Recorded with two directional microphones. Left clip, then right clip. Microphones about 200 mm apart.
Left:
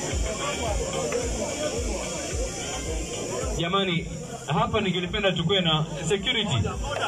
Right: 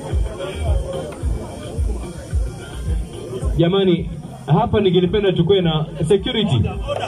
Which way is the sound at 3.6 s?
55° right (ahead or behind).